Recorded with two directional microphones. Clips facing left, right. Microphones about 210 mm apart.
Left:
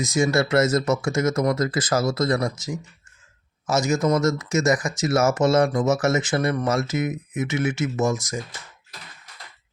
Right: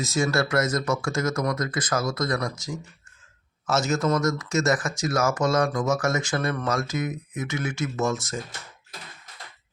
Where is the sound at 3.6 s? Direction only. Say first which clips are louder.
Left 3 dB; 15° left (ahead or behind).